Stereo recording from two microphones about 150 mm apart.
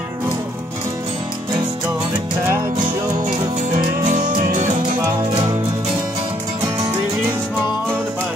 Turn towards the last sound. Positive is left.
turn(degrees=-20)  # may be behind; listen again after turning